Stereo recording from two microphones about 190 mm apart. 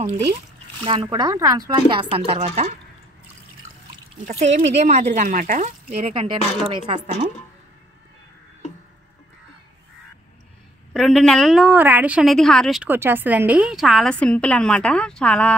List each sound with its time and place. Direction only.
0.8 s speech: 25° right (ahead or behind)
4.3 s speech: 35° right (ahead or behind)
10.9 s a woman's voice: 5° left (ahead or behind)